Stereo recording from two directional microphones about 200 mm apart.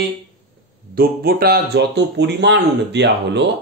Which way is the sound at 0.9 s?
50° right (ahead or behind).